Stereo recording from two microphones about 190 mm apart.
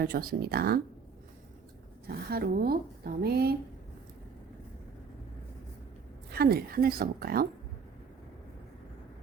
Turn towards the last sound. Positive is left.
turn(degrees=-50)  # may be behind; listen again after turning